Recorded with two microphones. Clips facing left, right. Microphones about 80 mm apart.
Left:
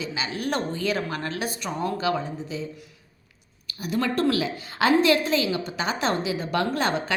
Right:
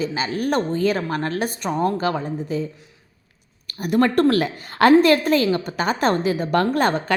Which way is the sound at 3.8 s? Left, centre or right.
Right.